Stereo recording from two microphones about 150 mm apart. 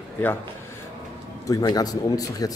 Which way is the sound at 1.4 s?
25° left (ahead or behind).